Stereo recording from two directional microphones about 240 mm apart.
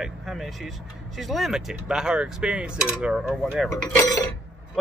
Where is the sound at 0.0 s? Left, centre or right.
Centre.